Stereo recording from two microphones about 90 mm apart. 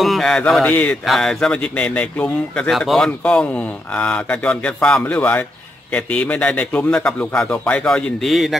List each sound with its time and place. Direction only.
0.0 s a sound: 5° left (ahead or behind)
0.7 s speech: 15° left (ahead or behind)
1.0 s a man's voice: 5° left (ahead or behind)